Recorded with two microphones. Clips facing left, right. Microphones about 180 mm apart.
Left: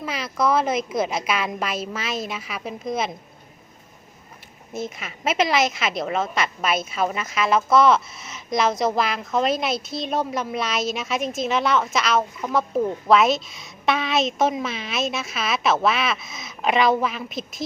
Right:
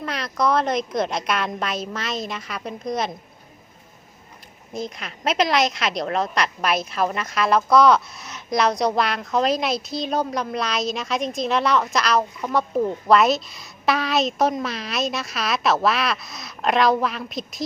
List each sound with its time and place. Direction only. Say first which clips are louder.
0.0 s a woman's voice: even; 5° left (ahead or behind)
4.7 s a woman's voice: even; 5° left (ahead or behind)